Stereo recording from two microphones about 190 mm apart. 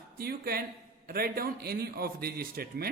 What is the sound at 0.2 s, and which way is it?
A man's voice, 55° right (ahead or behind).